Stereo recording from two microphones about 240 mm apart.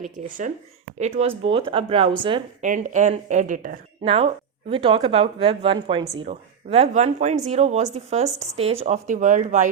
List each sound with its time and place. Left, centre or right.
0.9 s speech: right
2.6 s speech: right